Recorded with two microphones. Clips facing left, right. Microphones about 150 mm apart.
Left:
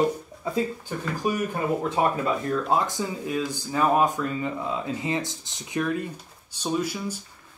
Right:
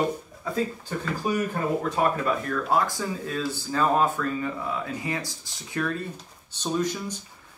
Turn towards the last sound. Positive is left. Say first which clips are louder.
# even
turn(degrees=10)  # may be behind; listen again after turning